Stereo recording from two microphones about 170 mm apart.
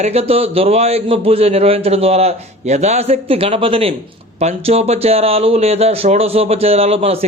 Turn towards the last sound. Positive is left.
turn(degrees=-35)  # may be behind; listen again after turning